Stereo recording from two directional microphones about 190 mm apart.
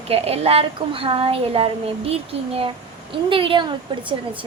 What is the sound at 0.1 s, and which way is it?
A woman's voice, 30° right (ahead or behind).